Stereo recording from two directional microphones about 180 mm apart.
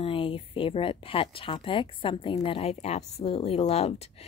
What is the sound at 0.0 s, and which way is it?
Speech, 30° left (ahead or behind).